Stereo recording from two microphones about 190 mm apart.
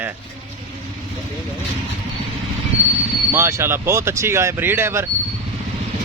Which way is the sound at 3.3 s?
15° right (ahead or behind).